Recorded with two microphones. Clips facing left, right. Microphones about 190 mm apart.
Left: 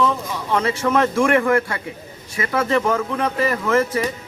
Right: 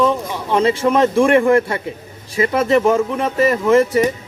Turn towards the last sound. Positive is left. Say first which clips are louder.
# right 6 dB
turn(degrees=-20)  # may be behind; listen again after turning